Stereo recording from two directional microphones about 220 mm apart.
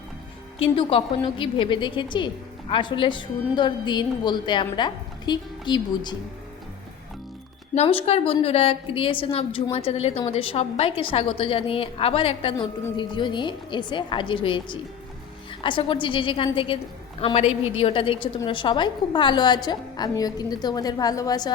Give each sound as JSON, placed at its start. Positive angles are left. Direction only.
{"t": 0.6, "sound": "a woman's voice", "side_deg": 25}
{"t": 7.8, "sound": "a woman's voice", "side_deg": 25}